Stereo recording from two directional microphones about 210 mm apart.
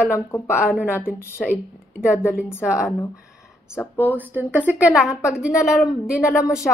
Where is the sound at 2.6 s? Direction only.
5° right (ahead or behind).